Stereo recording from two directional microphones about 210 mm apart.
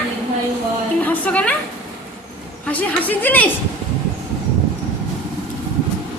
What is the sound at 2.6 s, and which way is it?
Speech, 5° left (ahead or behind).